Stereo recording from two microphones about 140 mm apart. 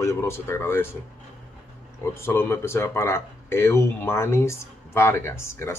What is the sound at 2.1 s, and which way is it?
Speech, 15° left (ahead or behind).